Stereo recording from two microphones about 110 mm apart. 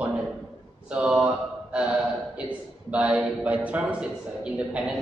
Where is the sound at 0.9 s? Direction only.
10° right (ahead or behind).